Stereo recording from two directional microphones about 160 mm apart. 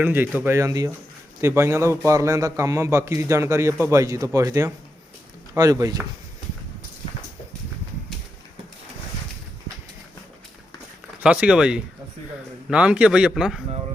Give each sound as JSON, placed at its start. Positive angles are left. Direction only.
{"t": 0.0, "sound": "a man's voice", "side_deg": -10}
{"t": 11.2, "sound": "a man's voice", "side_deg": -5}